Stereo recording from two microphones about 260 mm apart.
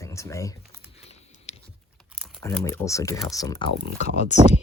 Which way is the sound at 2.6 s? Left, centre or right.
Centre.